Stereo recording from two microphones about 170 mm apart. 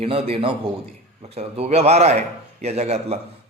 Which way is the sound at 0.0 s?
35° right (ahead or behind).